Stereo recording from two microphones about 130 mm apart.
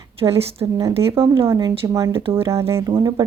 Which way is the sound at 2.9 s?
35° right (ahead or behind).